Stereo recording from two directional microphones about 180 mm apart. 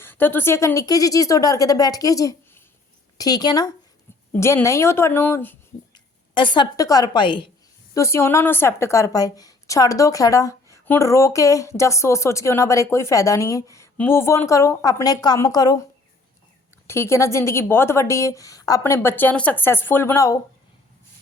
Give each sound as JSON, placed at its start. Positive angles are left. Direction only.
{"t": 0.0, "sound": "a woman's voice", "side_deg": 10}
{"t": 5.9, "sound": "a woman's voice", "side_deg": 25}
{"t": 7.9, "sound": "a woman's voice", "side_deg": 15}
{"t": 16.8, "sound": "a woman's voice", "side_deg": 15}